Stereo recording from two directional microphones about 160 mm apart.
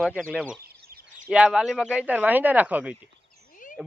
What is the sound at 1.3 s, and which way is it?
Speech, 5° right (ahead or behind).